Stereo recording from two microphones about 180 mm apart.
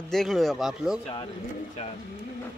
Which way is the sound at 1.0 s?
30° left (ahead or behind).